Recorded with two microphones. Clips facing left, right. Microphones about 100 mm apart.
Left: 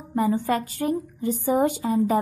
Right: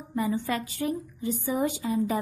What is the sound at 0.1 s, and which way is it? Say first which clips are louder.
A woman's voice: left 5 dB; 45° left (ahead or behind).